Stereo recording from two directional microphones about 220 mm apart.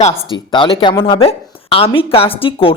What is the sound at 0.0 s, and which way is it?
Speech, 25° left (ahead or behind).